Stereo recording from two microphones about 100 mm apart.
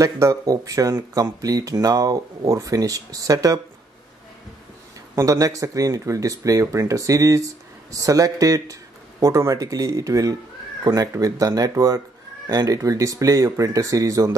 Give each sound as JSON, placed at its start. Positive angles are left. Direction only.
{"t": 0.0, "sound": "speech", "side_deg": -35}
{"t": 5.1, "sound": "speech", "side_deg": -35}